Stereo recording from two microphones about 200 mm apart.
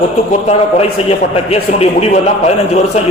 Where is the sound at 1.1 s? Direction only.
30° left (ahead or behind).